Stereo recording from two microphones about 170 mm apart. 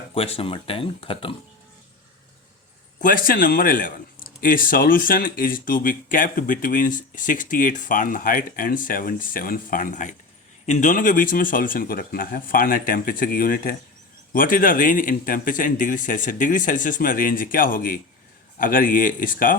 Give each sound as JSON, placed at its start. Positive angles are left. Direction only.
{"t": 0.1, "sound": "speech", "side_deg": 35}
{"t": 3.0, "sound": "speech", "side_deg": 55}